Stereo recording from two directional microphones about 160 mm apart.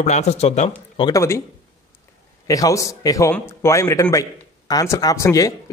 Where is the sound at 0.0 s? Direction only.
45° left (ahead or behind).